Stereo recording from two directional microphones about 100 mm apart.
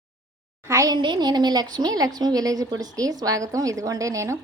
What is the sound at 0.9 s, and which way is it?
A woman's voice, 50° right (ahead or behind).